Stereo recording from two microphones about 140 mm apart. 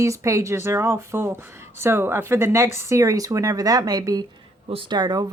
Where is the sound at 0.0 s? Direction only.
20° right (ahead or behind).